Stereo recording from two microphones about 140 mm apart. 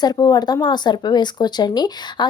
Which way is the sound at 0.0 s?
30° left (ahead or behind).